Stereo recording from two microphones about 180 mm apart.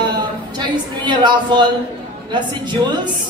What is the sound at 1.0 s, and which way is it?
Speech, 25° right (ahead or behind).